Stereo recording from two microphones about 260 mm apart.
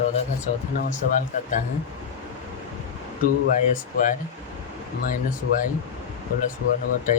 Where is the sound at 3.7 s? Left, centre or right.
Left.